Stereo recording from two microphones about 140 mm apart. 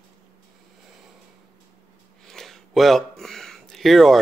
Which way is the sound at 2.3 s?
5° left (ahead or behind).